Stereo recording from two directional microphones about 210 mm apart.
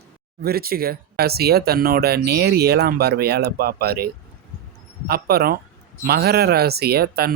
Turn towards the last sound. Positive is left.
turn(degrees=-50)  # may be behind; listen again after turning